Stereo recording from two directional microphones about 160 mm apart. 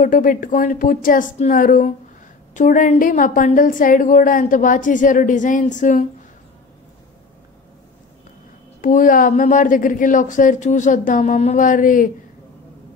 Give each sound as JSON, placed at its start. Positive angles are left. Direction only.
{"t": 0.0, "sound": "a woman's voice", "side_deg": 55}
{"t": 8.8, "sound": "a woman's voice", "side_deg": 55}